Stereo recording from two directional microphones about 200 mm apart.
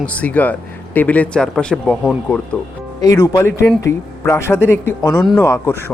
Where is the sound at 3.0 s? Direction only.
20° left (ahead or behind).